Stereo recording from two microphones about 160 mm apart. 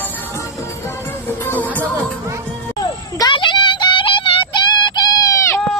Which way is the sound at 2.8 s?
25° left (ahead or behind).